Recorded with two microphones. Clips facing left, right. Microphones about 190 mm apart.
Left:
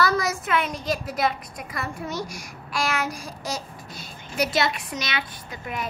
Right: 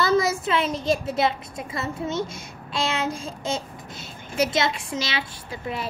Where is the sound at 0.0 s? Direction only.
25° right (ahead or behind).